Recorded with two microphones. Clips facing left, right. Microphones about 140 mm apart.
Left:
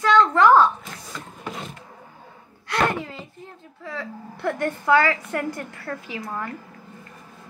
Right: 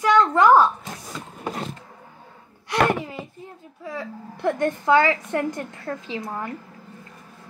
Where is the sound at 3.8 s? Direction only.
20° right (ahead or behind).